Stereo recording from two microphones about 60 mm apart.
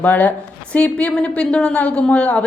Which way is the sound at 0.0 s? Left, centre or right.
Left.